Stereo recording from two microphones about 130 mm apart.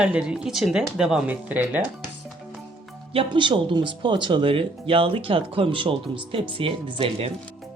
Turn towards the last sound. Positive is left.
turn(degrees=-50)  # may be behind; listen again after turning